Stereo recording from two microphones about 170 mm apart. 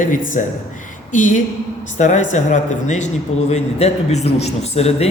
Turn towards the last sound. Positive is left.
turn(degrees=35)  # may be behind; listen again after turning